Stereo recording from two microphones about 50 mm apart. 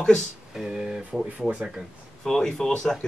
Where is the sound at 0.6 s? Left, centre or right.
Centre.